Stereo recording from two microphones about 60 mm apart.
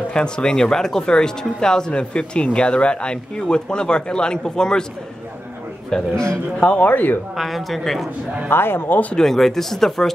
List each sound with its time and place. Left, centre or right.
0.1 s speech: centre
5.9 s a man's voice: centre; by 7.2 s left
7.3 s speech: centre
8.5 s speech: left
9.1 s speech: centre